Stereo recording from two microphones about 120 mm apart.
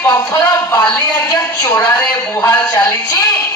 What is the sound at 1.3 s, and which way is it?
A woman's voice, 30° left (ahead or behind).